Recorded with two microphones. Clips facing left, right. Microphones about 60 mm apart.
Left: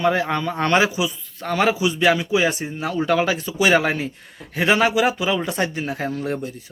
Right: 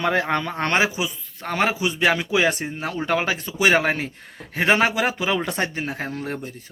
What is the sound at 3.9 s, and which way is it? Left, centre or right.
Speech, right.